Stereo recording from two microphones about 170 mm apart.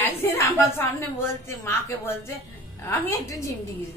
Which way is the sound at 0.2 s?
15° left (ahead or behind).